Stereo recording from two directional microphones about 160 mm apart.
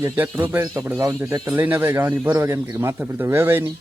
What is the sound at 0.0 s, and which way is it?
Speech, 15° right (ahead or behind).